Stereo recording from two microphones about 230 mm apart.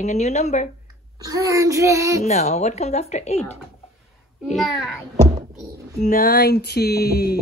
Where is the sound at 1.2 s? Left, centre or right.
Centre.